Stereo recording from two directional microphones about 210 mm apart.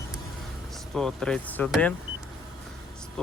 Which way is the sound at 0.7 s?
Centre (ahead or behind).